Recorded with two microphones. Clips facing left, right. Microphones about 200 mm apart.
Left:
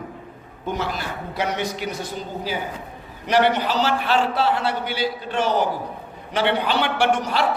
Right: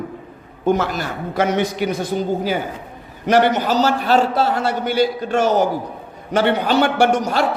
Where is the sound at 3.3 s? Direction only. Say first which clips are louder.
Right 4 dB; 45° right (ahead or behind).